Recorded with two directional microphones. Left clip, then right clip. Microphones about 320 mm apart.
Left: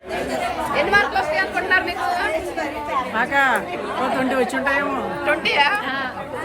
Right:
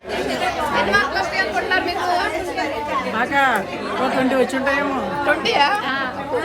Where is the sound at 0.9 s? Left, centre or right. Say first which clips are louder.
Left 4 dB; centre.